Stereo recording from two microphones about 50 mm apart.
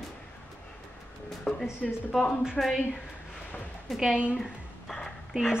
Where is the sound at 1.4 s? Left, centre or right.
Centre.